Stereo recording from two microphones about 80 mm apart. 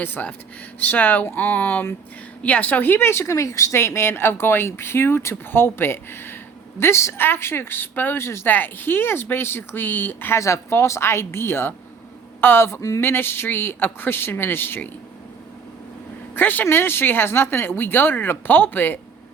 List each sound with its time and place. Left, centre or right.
0.0 s speech: left
10.4 s a woman's voice: left
16.3 s speech: left